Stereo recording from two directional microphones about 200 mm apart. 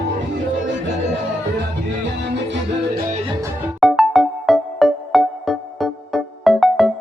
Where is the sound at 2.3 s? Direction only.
60° right (ahead or behind).